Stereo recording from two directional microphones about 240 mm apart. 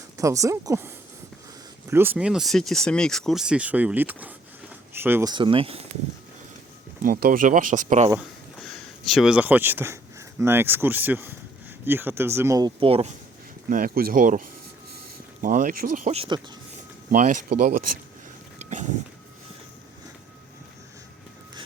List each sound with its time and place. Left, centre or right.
0.2 s speech: centre
7.0 s speech: right
8.1 s speech: centre; by 13.1 s right
13.7 s speech: right
17.7 s speech: right
18.6 s a sound: right